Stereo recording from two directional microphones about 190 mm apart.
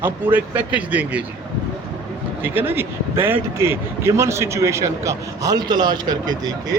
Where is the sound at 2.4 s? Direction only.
10° right (ahead or behind).